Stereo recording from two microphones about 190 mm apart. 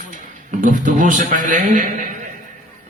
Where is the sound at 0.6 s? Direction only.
40° right (ahead or behind).